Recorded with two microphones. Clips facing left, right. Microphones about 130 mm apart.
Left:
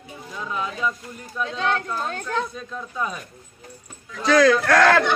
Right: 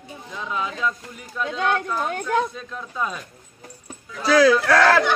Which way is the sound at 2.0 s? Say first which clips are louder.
Right 4 dB; 15° right (ahead or behind).